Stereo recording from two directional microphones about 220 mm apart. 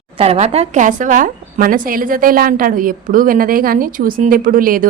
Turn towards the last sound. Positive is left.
turn(degrees=-40)  # may be behind; listen again after turning